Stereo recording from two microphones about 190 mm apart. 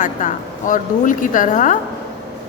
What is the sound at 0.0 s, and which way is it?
A woman's voice, 40° left (ahead or behind).